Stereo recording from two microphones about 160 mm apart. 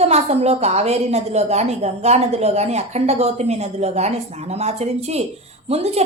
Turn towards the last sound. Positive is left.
turn(degrees=-40)  # may be behind; listen again after turning